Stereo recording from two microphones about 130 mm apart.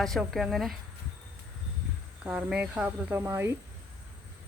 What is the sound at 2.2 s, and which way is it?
Speech, 10° right (ahead or behind).